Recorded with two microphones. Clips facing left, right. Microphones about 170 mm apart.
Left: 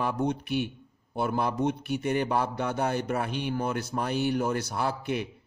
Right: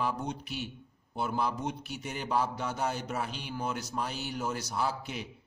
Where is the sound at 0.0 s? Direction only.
60° left (ahead or behind).